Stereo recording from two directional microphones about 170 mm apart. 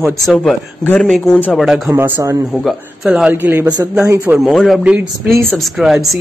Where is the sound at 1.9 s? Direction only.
15° right (ahead or behind).